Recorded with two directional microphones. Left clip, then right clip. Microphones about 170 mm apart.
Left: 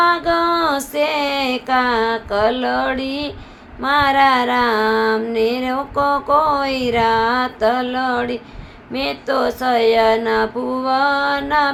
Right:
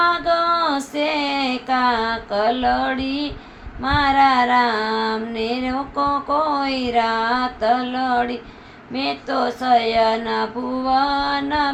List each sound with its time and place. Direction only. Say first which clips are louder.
0.0 s female singing: left 2 dB; 45° left (ahead or behind)
3.8 s music: left 2 dB; 45° left (ahead or behind)